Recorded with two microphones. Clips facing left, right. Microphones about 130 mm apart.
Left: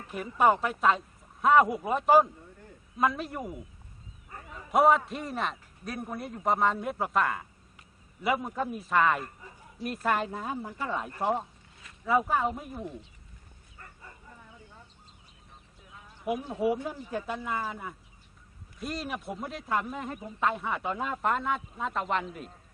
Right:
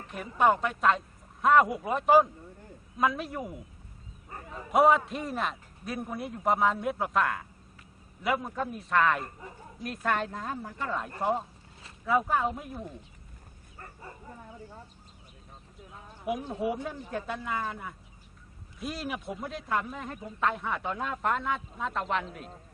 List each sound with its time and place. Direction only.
0.1 s speech: 5° left (ahead or behind)
4.7 s speech: centre (ahead or behind)
11.2 s speech: centre (ahead or behind)
13.7 s bow-wow: 30° right (ahead or behind)
16.2 s speech: centre (ahead or behind)